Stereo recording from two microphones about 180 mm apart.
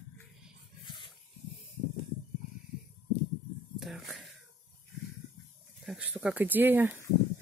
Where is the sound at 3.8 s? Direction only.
Centre (ahead or behind).